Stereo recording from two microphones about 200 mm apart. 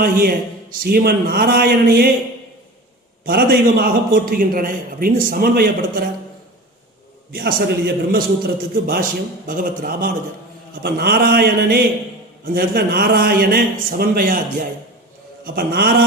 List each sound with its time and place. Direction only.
0.0 s a man's voice: 45° right (ahead or behind)
3.2 s a man's voice: 50° right (ahead or behind)
7.3 s a man's voice: 50° right (ahead or behind)
15.5 s a man's voice: 55° right (ahead or behind)